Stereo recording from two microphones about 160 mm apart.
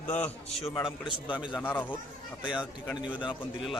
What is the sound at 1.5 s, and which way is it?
Speech, 10° left (ahead or behind).